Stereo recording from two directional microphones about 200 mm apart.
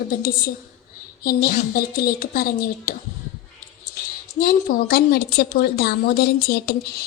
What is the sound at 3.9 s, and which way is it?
A woman's voice, 45° left (ahead or behind).